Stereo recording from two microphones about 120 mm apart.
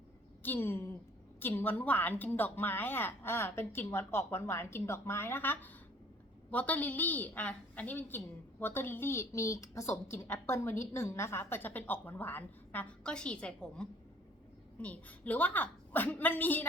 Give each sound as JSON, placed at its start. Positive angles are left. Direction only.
{"t": 0.4, "sound": "a woman's voice", "side_deg": 15}